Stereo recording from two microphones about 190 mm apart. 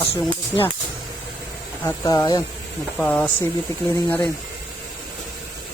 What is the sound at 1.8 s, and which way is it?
Speech, 15° left (ahead or behind).